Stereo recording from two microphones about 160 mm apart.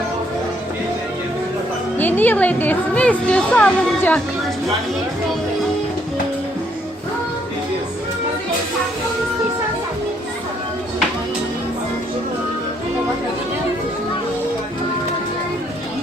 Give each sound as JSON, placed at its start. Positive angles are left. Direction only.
{"t": 2.0, "sound": "speech", "side_deg": 10}